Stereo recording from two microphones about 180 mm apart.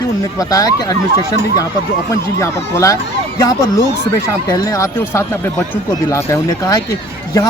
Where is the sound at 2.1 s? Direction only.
15° left (ahead or behind).